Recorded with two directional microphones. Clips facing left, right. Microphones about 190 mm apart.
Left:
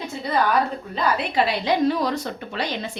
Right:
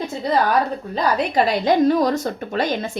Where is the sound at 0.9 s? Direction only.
40° right (ahead or behind).